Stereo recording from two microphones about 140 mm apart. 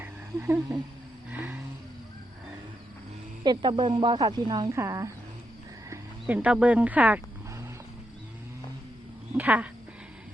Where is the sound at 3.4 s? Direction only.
35° right (ahead or behind).